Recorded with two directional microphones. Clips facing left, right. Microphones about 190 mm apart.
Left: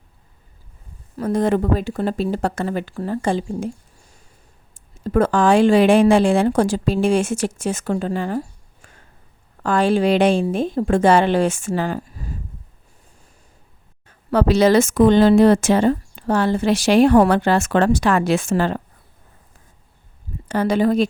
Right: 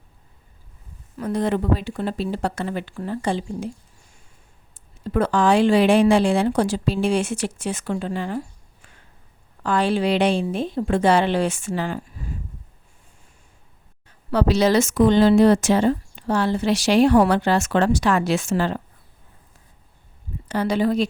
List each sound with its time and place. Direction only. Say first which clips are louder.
1.2 s speech: left 4 dB; 45° left (ahead or behind)
4.7 s speech: left 4 dB; 45° left (ahead or behind)
14.3 s speech: left 3 dB; 50° left (ahead or behind)
20.5 s speech: left 3 dB; 50° left (ahead or behind)